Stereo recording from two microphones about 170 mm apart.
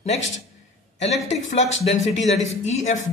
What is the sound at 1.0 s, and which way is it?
Speech, 40° left (ahead or behind).